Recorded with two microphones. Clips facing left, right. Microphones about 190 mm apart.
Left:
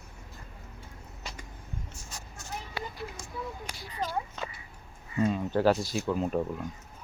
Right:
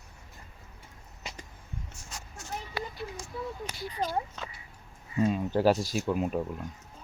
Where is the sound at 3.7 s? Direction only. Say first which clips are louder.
Right 3 dB; 30° right (ahead or behind).